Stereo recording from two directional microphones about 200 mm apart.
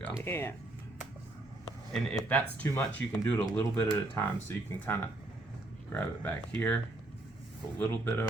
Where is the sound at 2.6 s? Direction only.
10° left (ahead or behind).